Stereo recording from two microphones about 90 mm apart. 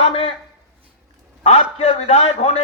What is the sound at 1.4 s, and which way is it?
Speech, 90° left.